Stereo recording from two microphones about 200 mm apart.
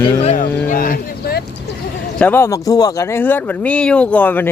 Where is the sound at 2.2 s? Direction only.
10° left (ahead or behind).